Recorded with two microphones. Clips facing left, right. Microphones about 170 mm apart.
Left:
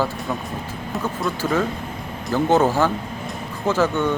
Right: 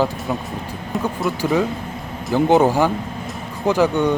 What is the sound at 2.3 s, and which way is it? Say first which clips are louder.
Speech: right 3 dB; 15° right (ahead or behind).